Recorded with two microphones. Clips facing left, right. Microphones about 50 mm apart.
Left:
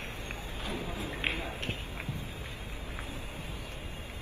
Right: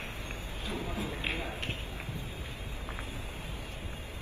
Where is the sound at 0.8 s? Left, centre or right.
Right.